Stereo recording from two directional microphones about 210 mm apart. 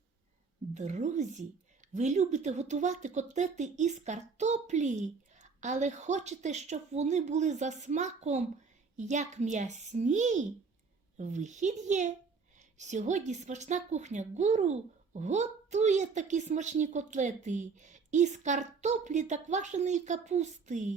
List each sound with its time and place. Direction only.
0.7 s a woman's voice: 35° right (ahead or behind)